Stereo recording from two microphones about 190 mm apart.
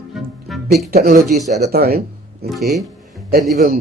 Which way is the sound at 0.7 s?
55° right (ahead or behind).